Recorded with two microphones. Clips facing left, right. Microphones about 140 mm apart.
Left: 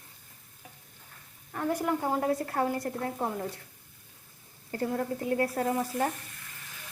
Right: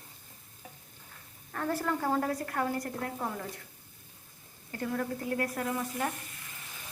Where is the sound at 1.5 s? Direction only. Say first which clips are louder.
Left 3 dB; 15° left (ahead or behind).